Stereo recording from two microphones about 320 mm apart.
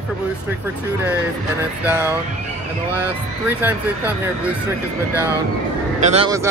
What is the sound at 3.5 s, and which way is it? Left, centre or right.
Speech, centre.